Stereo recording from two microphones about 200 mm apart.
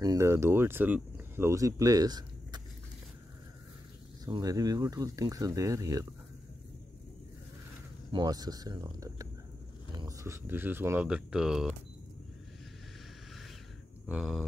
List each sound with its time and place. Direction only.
0.0 s speech: 15° right (ahead or behind)
4.3 s speech: 20° right (ahead or behind)
8.1 s speech: 20° right (ahead or behind); by 11.7 s 5° right (ahead or behind)
14.0 s a sound: 5° right (ahead or behind)